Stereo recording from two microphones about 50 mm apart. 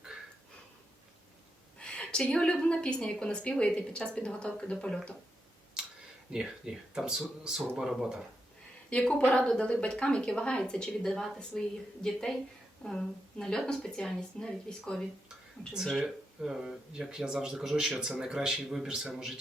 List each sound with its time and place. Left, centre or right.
1.8 s a sound: centre
2.5 s a woman's voice: left
6.3 s speech: centre
8.9 s a woman's voice: left
16.4 s speech: centre